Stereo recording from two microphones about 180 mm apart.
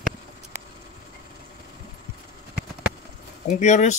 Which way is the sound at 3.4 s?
40° left (ahead or behind).